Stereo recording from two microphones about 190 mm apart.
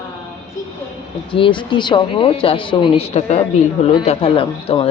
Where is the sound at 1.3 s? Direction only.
25° left (ahead or behind).